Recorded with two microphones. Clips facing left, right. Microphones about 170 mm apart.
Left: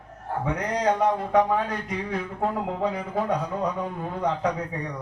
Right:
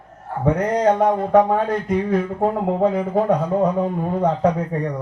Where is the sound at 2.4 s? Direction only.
40° right (ahead or behind).